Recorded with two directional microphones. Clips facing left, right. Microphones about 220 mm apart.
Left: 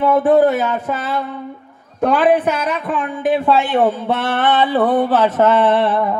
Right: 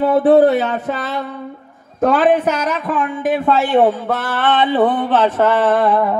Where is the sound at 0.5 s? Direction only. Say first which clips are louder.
Right 1 dB; 40° right (ahead or behind).